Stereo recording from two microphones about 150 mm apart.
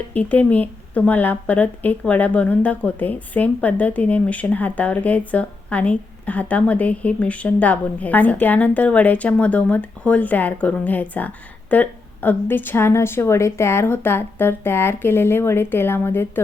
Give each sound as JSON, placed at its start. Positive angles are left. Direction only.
{"t": 0.1, "sound": "speech", "side_deg": 10}